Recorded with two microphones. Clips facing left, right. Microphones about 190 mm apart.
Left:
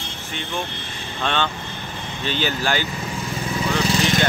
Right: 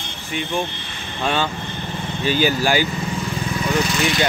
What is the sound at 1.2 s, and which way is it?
Speech, 5° right (ahead or behind).